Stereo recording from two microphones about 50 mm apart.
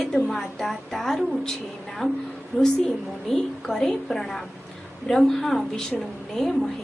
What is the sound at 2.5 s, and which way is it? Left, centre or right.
A woman's voice, centre.